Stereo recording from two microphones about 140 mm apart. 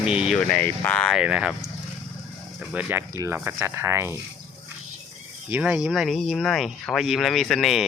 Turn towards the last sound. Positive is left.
turn(degrees=0)  # may be behind; listen again after turning